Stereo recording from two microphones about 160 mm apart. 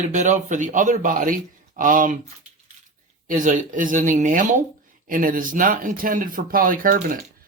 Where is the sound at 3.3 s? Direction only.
55° right (ahead or behind).